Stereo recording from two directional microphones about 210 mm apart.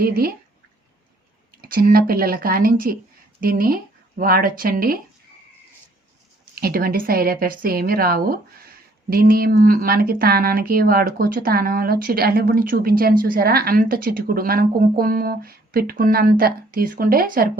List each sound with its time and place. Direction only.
0.0 s speech: 45° right (ahead or behind)
1.6 s speech: 45° right (ahead or behind)
6.6 s speech: 45° right (ahead or behind)